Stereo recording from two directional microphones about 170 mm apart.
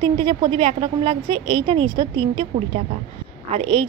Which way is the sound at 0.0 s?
30° right (ahead or behind).